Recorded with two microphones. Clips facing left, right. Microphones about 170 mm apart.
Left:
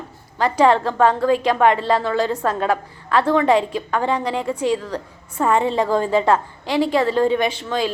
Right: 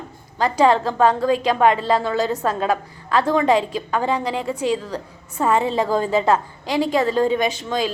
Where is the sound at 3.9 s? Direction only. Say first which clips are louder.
Left 1 dB; 15° right (ahead or behind).